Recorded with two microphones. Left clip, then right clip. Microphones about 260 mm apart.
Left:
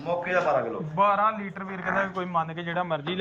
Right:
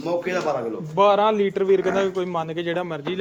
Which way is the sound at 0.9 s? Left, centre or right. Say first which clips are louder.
Right 5 dB; right.